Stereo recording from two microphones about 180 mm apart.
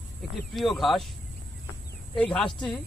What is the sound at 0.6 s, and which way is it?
Speech, centre (ahead or behind).